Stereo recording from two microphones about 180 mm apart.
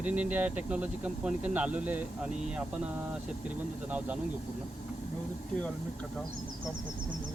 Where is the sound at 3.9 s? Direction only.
10° right (ahead or behind).